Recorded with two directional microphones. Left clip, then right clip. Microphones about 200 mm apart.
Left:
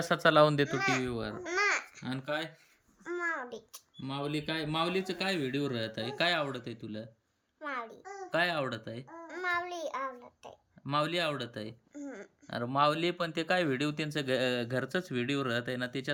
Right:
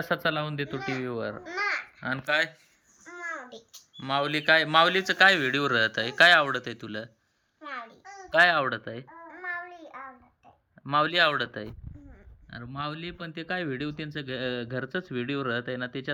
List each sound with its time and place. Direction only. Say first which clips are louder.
0.0 s speech: left 4 dB; 15° left (ahead or behind)
0.9 s speech: even; 10° left (ahead or behind)
1.5 s a child's voice: left 1 dB; 40° left (ahead or behind)
2.0 s speech: right 9 dB; 10° left (ahead or behind)
3.0 s a sound: left 2 dB; 25° left (ahead or behind)
4.0 s speech: right 11 dB; centre (ahead or behind)
7.6 s child singing: even; 25° left (ahead or behind)
8.3 s speech: right 10 dB; 5° left (ahead or behind)
10.8 s speech: right 8 dB; 10° left (ahead or behind)